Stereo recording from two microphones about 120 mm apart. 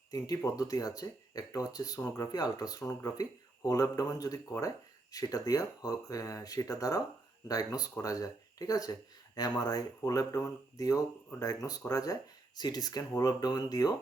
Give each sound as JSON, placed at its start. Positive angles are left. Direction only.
{"t": 0.1, "sound": "speech", "side_deg": 30}